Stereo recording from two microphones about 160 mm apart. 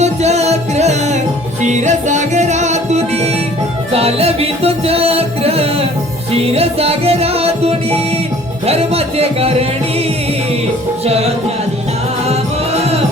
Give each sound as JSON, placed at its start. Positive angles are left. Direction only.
{"t": 0.0, "sound": "music", "side_deg": -45}
{"t": 11.0, "sound": "music", "side_deg": -40}
{"t": 12.3, "sound": "music", "side_deg": -40}